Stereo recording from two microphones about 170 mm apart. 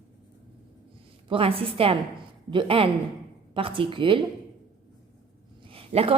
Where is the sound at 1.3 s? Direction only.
30° right (ahead or behind).